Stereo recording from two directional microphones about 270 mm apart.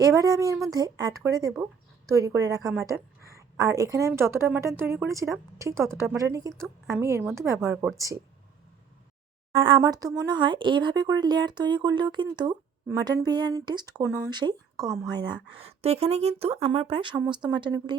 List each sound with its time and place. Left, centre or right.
0.0 s speech: centre
9.5 s speech: centre